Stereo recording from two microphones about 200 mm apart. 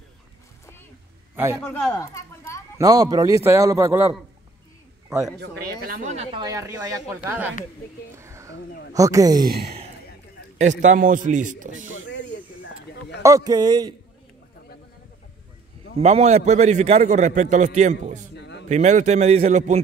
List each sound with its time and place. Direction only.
1.3 s a man's voice: 10° right (ahead or behind)
1.9 s a sound: 15° left (ahead or behind)
2.8 s a man's voice: 15° right (ahead or behind)
5.4 s speech: 50° right (ahead or behind)
6.4 s a man's voice: 15° right (ahead or behind)
8.2 s a sound: 15° right (ahead or behind)
8.9 s a man's voice: 15° right (ahead or behind)
9.5 s speech: 50° right (ahead or behind)
10.6 s a man's voice: 35° right (ahead or behind)
12.1 s snake: 60° left (ahead or behind)
13.2 s a man's voice: 15° right (ahead or behind)
16.0 s a man's voice: 30° right (ahead or behind)
18.3 s a sound: 60° left (ahead or behind)
18.7 s a man's voice: 35° right (ahead or behind)